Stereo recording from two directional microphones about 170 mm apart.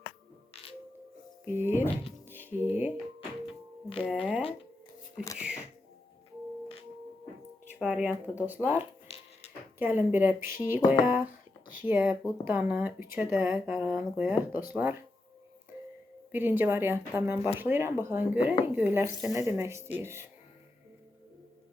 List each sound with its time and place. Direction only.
0.5 s music: 35° left (ahead or behind)
1.5 s speech: 15° right (ahead or behind)
3.4 s music: 30° left (ahead or behind)
4.0 s speech: 5° right (ahead or behind)
7.7 s speech: 5° right (ahead or behind)
9.0 s a sound: 35° left (ahead or behind)
9.7 s speech: 10° right (ahead or behind)
16.3 s speech: 10° right (ahead or behind)